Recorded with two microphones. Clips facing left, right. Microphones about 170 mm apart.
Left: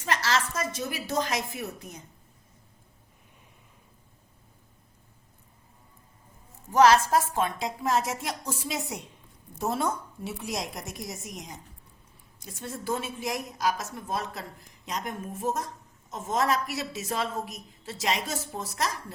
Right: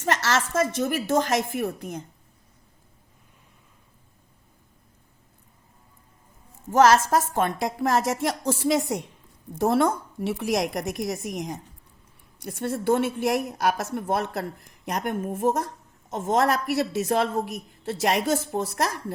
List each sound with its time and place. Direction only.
0.0 s a woman's voice: 50° right (ahead or behind)
6.7 s a woman's voice: 50° right (ahead or behind); by 9.0 s 65° right (ahead or behind)
9.6 s a woman's voice: 80° right; by 19.1 s 60° right (ahead or behind)